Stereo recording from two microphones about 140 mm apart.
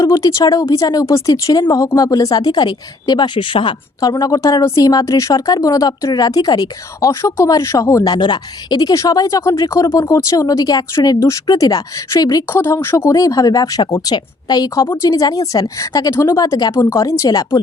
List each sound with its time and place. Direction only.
0.0 s speech: 25° left (ahead or behind)
4.1 s speech: 25° left (ahead or behind)